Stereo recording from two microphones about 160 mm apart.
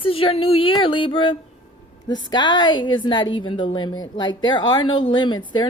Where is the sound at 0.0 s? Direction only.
35° left (ahead or behind).